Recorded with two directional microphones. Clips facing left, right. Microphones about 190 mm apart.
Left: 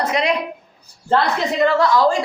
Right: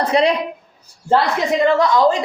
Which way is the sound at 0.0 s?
30° right (ahead or behind).